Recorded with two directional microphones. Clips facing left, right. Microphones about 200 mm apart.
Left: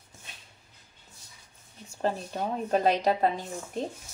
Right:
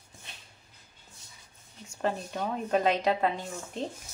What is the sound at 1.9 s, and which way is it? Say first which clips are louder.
A woman's voice: left 1 dB; 30° left (ahead or behind).